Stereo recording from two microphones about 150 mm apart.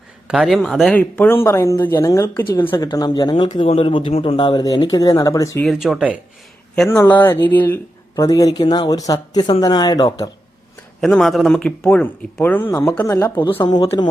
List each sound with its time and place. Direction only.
0.3 s speech: centre (ahead or behind); by 5.6 s 20° left (ahead or behind)
5.6 s speech: 5° right (ahead or behind)
6.8 s speech: 15° left (ahead or behind)
8.1 s speech: 25° left (ahead or behind)
11.0 s speech: 5° left (ahead or behind)